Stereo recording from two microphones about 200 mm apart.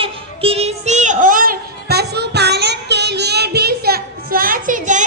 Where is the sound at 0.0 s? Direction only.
30° right (ahead or behind).